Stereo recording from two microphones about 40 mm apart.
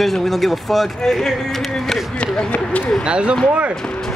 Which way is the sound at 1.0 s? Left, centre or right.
Centre.